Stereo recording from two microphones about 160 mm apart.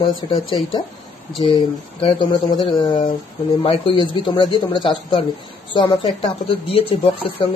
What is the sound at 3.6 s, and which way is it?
Speech, 35° left (ahead or behind).